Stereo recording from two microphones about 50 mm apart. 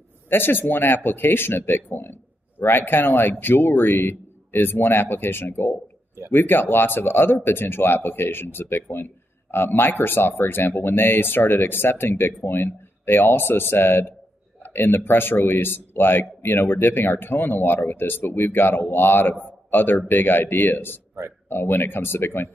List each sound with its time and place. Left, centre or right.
0.3 s speech: left
19.4 s a sound: left
20.1 s speech: left